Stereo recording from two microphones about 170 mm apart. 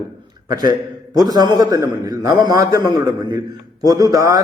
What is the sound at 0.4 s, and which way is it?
A man's voice, 25° right (ahead or behind).